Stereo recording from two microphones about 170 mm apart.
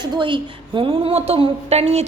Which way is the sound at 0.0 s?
25° right (ahead or behind).